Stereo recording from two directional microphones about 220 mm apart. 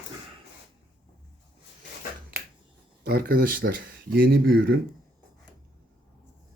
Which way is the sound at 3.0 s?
45° right (ahead or behind).